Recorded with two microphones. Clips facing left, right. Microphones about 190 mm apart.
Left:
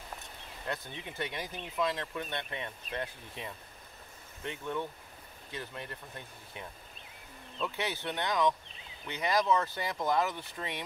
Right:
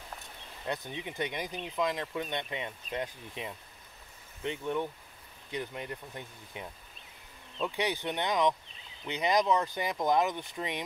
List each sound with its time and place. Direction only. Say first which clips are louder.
0.7 s speech: right 3 dB; 20° right (ahead or behind)
7.6 s speech: right 3 dB; 15° right (ahead or behind)